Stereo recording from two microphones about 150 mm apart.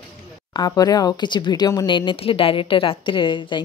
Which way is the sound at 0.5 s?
25° left (ahead or behind).